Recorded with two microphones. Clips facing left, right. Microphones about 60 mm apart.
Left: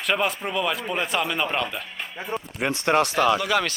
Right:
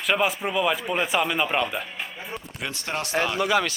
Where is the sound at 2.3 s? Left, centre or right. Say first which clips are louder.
Left 9 dB; left.